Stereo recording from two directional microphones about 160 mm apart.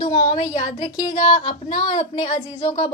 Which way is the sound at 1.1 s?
50° left (ahead or behind).